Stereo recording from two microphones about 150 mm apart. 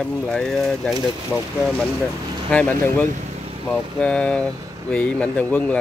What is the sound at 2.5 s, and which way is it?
Speech, 10° left (ahead or behind).